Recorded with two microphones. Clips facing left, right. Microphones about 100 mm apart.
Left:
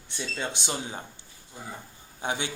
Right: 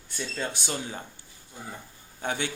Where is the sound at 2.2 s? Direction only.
15° left (ahead or behind).